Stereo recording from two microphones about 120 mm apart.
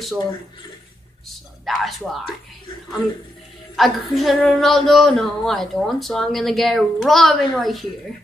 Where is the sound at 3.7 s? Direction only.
Centre (ahead or behind).